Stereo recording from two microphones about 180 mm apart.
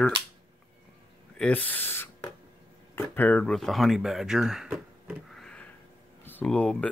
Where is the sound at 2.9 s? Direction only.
10° left (ahead or behind).